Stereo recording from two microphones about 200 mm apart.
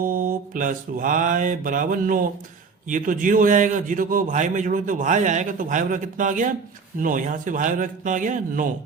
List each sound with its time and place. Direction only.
0.0 s mantra: 45° right (ahead or behind)
2.9 s a man's voice: 40° right (ahead or behind)